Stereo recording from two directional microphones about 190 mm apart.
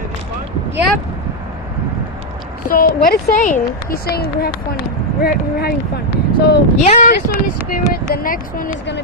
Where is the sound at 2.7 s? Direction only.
50° left (ahead or behind).